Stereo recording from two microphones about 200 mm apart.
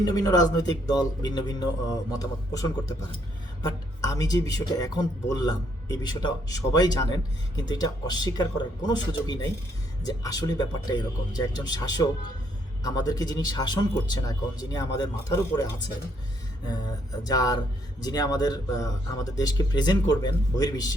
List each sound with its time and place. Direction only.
0.0 s a man's voice: 20° left (ahead or behind)
17.2 s a man's voice: 20° left (ahead or behind)